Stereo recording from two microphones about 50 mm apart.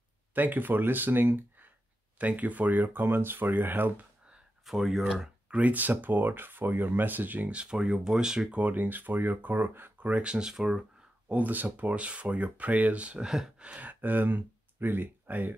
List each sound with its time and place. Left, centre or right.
0.3 s speech: right
2.1 s speech: right
4.6 s speech: centre
5.5 s speech: right
7.6 s speech: centre
8.7 s speech: right
10.0 s speech: right
11.2 s speech: right
13.2 s speech: centre
13.7 s speech: right